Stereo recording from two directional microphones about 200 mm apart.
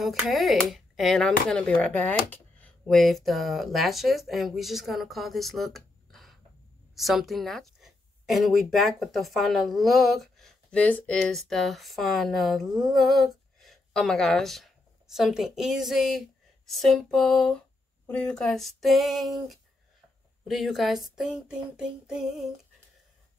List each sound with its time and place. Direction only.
0.0 s a woman's voice: centre (ahead or behind)